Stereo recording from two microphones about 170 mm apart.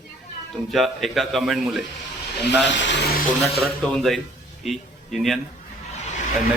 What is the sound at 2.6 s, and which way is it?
Speech, 90° left.